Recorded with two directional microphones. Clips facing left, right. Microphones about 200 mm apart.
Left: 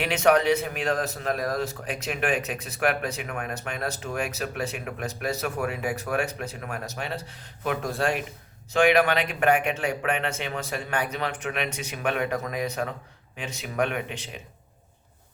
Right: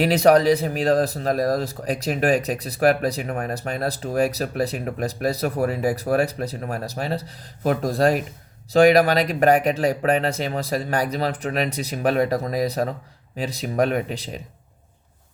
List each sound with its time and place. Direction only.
0.0 s speech: 35° right (ahead or behind)